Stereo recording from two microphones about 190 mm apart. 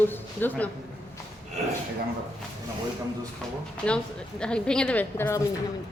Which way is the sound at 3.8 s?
5° left (ahead or behind).